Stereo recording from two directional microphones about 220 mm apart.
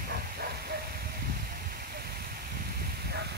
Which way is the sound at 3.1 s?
50° right (ahead or behind).